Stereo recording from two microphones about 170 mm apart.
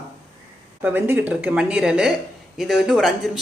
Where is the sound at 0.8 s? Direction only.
10° right (ahead or behind).